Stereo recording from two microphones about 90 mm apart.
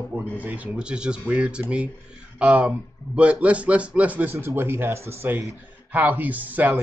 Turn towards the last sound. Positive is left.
turn(degrees=-20)  # may be behind; listen again after turning